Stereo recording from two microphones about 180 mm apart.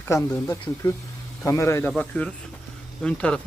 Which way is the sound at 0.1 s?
15° left (ahead or behind).